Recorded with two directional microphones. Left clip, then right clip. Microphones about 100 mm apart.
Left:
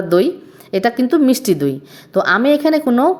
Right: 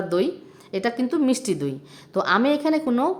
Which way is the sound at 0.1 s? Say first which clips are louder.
Left 12 dB; 40° left (ahead or behind).